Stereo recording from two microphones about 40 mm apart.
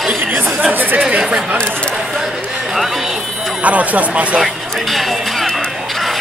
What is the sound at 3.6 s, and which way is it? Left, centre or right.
Speech, right.